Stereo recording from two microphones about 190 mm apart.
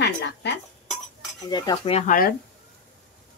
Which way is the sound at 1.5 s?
20° left (ahead or behind).